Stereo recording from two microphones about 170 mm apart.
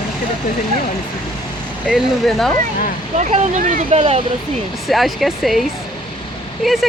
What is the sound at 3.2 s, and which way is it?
Speech, 45° right (ahead or behind).